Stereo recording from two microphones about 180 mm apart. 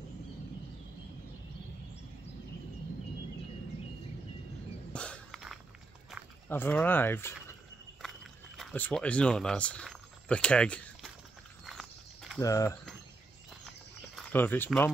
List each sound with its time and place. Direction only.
4.9 s a sound: 5° left (ahead or behind)
6.5 s speech: 10° left (ahead or behind)
8.0 s a sound: centre (ahead or behind)
11.6 s walk: centre (ahead or behind)
12.4 s speech: 20° left (ahead or behind)
14.3 s speech: 10° left (ahead or behind)